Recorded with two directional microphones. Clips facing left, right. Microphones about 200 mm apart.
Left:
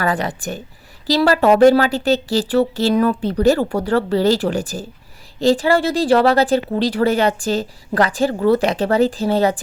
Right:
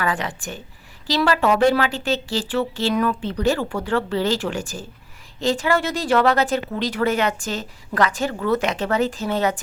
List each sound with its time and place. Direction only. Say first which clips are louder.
0.0 s a woman's voice: left 4 dB; 40° left (ahead or behind)